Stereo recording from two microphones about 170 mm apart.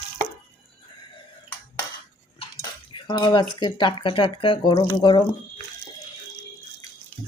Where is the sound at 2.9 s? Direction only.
25° left (ahead or behind).